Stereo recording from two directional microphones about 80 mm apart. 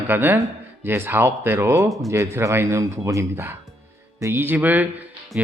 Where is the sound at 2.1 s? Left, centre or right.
Right.